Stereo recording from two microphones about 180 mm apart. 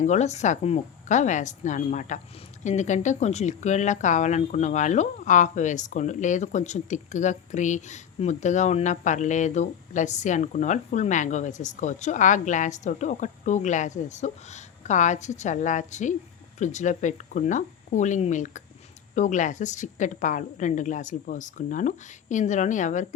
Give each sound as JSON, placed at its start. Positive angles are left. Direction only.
{"t": 0.0, "sound": "a woman's voice", "side_deg": 40}